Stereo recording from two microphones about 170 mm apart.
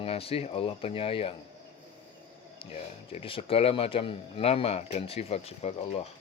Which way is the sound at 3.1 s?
30° left (ahead or behind).